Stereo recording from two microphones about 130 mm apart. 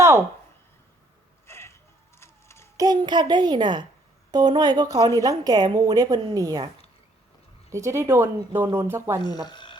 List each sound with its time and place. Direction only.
1.5 s a sound: 20° left (ahead or behind)
2.7 s speech: 30° right (ahead or behind)
7.7 s speech: 20° right (ahead or behind)
9.2 s speech: 35° left (ahead or behind)